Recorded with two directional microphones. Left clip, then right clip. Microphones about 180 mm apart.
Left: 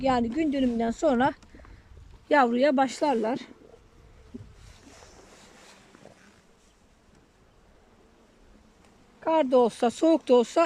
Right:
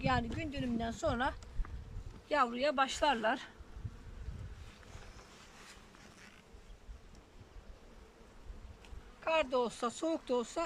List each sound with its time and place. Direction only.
0.0 s speech: 40° left (ahead or behind)
9.2 s speech: 45° left (ahead or behind)